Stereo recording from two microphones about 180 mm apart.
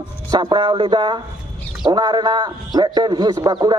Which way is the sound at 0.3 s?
25° right (ahead or behind).